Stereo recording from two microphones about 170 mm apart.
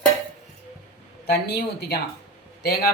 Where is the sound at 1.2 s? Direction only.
65° left (ahead or behind).